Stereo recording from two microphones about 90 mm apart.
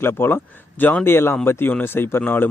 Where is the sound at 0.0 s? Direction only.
25° left (ahead or behind).